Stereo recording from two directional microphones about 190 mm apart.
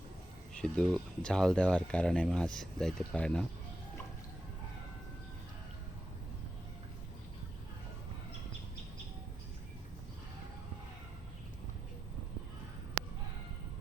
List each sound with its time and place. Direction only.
0.5 s speech: 5° left (ahead or behind)